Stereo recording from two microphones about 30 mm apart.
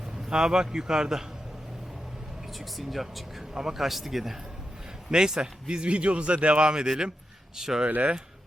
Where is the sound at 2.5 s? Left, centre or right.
Centre.